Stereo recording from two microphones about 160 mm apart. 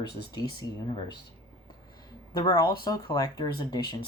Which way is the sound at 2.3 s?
25° left (ahead or behind).